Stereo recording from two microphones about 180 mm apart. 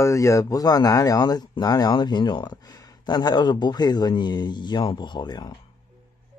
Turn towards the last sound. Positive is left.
turn(degrees=25)  # may be behind; listen again after turning